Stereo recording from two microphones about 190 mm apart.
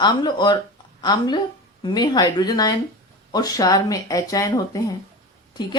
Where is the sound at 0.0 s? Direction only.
25° left (ahead or behind).